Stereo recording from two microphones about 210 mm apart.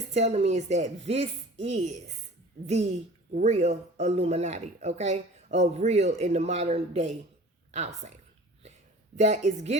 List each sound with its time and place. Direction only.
0.1 s speech: 30° right (ahead or behind)
3.3 s speech: 30° right (ahead or behind)
9.1 s speech: 35° right (ahead or behind)